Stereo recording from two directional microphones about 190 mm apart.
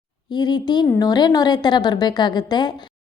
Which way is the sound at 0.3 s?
20° left (ahead or behind).